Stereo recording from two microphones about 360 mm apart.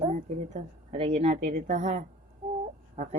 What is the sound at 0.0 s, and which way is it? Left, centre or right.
A woman's voice, centre.